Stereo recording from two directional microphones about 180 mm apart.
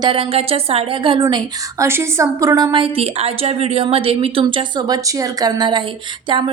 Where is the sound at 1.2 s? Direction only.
15° right (ahead or behind).